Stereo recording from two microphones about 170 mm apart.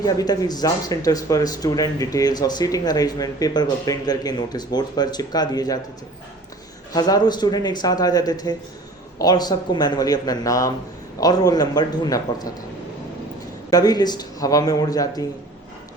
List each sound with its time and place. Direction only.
0.0 s speech: 20° left (ahead or behind)
6.9 s speech: 25° left (ahead or behind)
13.7 s speech: 20° left (ahead or behind)